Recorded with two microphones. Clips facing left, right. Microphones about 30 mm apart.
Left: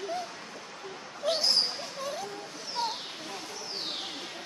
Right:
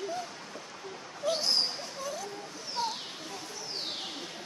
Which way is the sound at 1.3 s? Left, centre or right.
Left.